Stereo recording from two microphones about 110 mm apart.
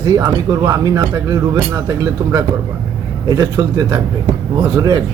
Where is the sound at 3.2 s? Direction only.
35° right (ahead or behind).